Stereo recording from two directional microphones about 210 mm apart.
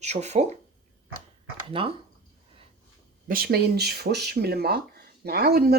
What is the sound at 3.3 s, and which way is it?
Speech, 45° right (ahead or behind).